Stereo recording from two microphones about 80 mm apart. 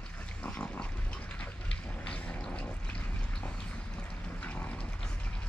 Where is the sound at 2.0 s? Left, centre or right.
Centre.